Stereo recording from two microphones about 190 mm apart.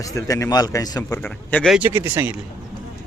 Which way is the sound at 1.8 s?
10° right (ahead or behind).